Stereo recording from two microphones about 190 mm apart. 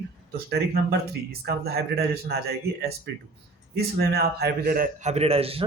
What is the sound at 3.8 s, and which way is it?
A man's voice, 55° right (ahead or behind).